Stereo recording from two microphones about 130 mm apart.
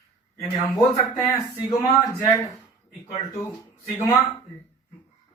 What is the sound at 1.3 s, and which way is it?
Speech, 25° left (ahead or behind).